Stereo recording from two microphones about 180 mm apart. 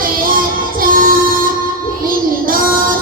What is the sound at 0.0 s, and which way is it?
Music, 50° right (ahead or behind).